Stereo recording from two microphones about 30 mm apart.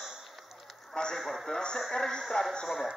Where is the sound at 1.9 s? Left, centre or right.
Centre.